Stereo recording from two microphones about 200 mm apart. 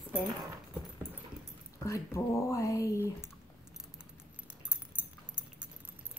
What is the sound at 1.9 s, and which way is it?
Speech, 15° left (ahead or behind).